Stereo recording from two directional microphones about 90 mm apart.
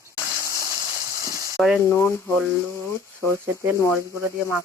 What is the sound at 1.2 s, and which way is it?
Frying, 40° right (ahead or behind).